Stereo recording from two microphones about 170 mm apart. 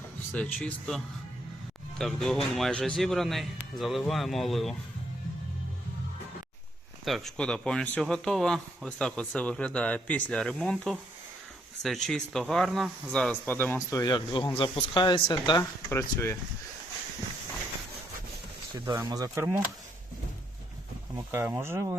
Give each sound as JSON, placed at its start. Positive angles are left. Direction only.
{"t": 0.3, "sound": "speech", "side_deg": 5}
{"t": 7.0, "sound": "speech", "side_deg": 0}
{"t": 13.9, "sound": "speech", "side_deg": 25}
{"t": 18.9, "sound": "speech", "side_deg": -20}
{"t": 21.2, "sound": "speech", "side_deg": -15}